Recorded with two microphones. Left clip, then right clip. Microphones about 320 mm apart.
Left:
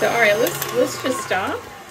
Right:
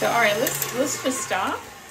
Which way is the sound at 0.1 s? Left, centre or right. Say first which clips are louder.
Left 4 dB; centre.